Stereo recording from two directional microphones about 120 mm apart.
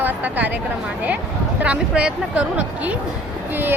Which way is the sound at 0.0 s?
15° right (ahead or behind).